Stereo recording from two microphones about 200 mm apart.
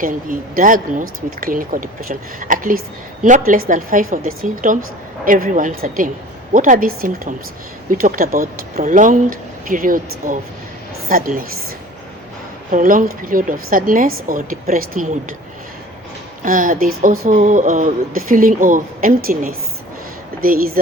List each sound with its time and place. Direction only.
0.0 s a woman's voice: 45° right (ahead or behind)
12.7 s a woman's voice: 40° right (ahead or behind)
16.4 s a woman's voice: 40° right (ahead or behind)